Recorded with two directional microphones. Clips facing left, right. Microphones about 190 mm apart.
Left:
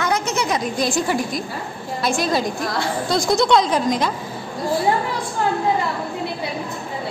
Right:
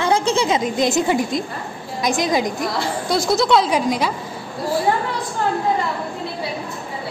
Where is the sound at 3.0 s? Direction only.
5° right (ahead or behind).